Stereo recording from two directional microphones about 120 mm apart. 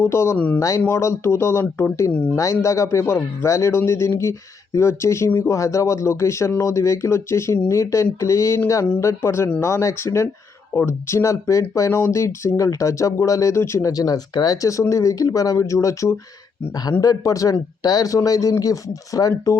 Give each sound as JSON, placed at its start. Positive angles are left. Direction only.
{"t": 0.0, "sound": "speech", "side_deg": 20}